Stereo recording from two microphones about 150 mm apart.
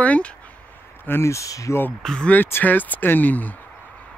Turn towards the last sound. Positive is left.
turn(degrees=10)  # may be behind; listen again after turning